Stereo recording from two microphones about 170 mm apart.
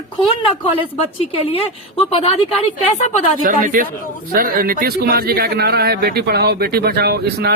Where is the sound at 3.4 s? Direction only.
55° right (ahead or behind).